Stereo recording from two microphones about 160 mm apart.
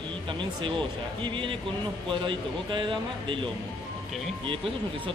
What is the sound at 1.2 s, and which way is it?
A man's voice, 30° right (ahead or behind).